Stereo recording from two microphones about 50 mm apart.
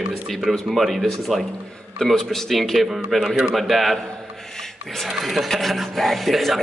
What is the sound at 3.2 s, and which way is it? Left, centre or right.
Speech, centre.